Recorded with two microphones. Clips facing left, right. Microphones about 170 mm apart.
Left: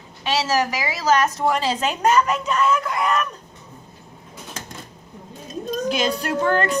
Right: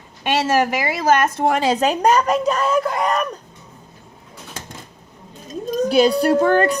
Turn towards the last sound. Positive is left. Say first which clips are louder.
# right 6 dB
turn(degrees=-40)  # may be behind; listen again after turning